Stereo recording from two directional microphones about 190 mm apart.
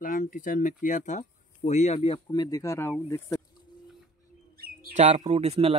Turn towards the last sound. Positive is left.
turn(degrees=-30)  # may be behind; listen again after turning